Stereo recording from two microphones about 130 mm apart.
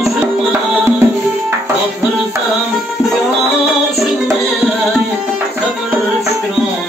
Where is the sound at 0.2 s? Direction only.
20° right (ahead or behind).